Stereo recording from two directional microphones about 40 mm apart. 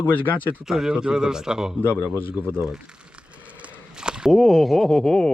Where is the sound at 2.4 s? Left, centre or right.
Right.